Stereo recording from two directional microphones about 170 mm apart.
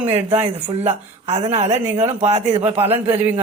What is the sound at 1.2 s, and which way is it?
Speech, 40° right (ahead or behind).